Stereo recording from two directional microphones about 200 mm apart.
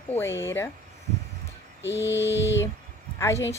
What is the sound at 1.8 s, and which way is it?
Mantra, 65° left (ahead or behind).